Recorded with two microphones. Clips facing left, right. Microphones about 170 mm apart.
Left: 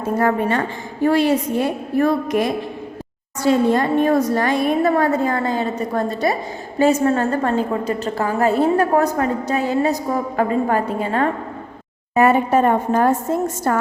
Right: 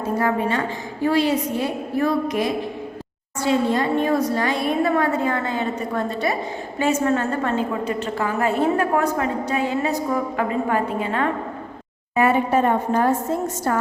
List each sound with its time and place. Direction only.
0.2 s a woman's voice: 50° left (ahead or behind)